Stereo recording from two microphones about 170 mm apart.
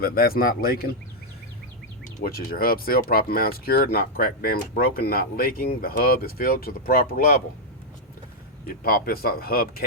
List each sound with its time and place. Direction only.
0.0 s speech: 60° left (ahead or behind)
2.2 s speech: 65° left (ahead or behind)
8.6 s speech: 60° left (ahead or behind)